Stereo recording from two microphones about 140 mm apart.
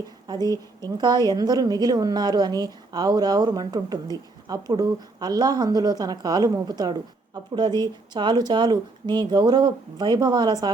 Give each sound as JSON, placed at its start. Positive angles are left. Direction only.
{"t": 0.3, "sound": "a woman's voice", "side_deg": -30}